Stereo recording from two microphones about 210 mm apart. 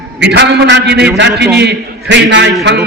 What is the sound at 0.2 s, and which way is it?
A man's voice, 55° right (ahead or behind).